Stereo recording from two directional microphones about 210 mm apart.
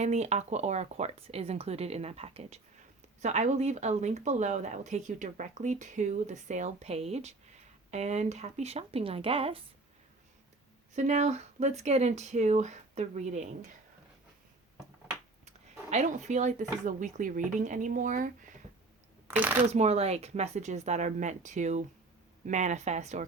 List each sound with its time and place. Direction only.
0.0 s speech: 30° right (ahead or behind)
10.9 s speech: 35° right (ahead or behind)
15.4 s speech: 35° right (ahead or behind)
19.3 s speech: 10° right (ahead or behind)
19.6 s speech: 30° right (ahead or behind)